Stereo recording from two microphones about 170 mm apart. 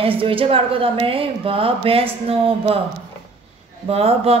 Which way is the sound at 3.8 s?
35° right (ahead or behind).